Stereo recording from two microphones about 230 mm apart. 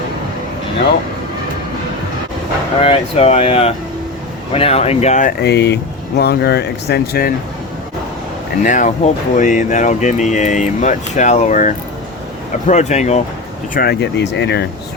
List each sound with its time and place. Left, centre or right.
2.8 s speech: left
5.4 s speech: left
8.6 s speech: left
13.7 s speech: left